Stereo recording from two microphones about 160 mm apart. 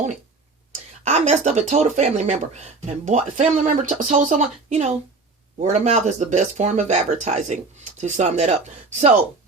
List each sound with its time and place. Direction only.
1.0 s speech: 45° right (ahead or behind)